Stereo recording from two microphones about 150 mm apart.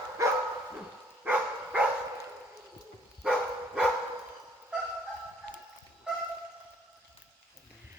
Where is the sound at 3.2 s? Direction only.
5° right (ahead or behind).